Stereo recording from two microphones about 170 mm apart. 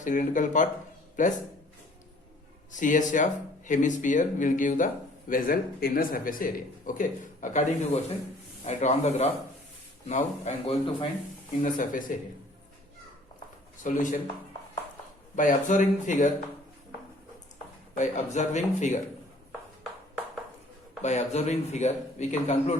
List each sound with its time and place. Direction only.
0.0 s speech: 50° left (ahead or behind)
2.7 s speech: 50° left (ahead or behind)
13.8 s speech: 50° left (ahead or behind)
15.4 s speech: 50° left (ahead or behind)
17.9 s speech: 45° left (ahead or behind)
21.0 s speech: 40° left (ahead or behind)